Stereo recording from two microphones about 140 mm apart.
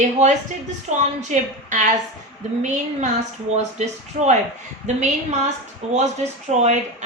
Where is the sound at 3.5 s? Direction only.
55° right (ahead or behind).